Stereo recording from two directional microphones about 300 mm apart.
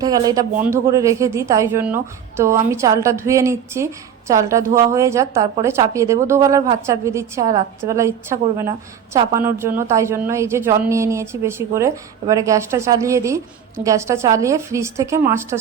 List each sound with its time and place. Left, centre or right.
0.0 s a woman's voice: centre